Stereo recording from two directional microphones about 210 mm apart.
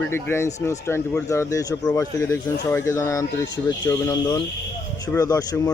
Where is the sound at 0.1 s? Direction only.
10° left (ahead or behind).